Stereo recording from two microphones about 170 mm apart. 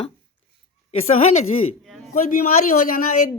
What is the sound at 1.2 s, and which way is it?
Speech, 40° left (ahead or behind).